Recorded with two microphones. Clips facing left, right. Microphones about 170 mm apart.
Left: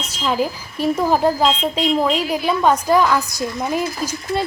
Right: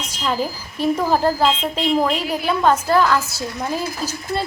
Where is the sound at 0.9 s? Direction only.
10° left (ahead or behind).